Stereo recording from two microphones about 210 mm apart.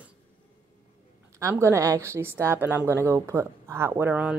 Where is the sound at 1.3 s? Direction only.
10° right (ahead or behind).